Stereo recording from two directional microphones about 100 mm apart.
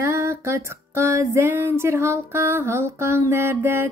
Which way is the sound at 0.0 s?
30° right (ahead or behind).